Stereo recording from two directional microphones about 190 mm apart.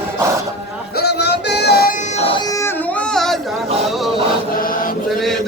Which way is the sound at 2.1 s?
30° left (ahead or behind).